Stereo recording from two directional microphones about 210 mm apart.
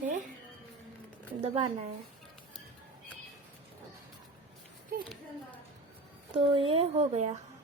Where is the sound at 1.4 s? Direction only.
25° right (ahead or behind).